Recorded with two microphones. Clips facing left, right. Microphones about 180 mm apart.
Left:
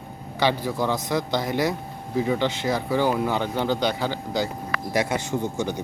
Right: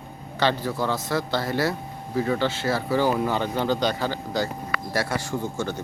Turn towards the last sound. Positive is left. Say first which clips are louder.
# left 2 dB
turn(degrees=15)  # may be behind; listen again after turning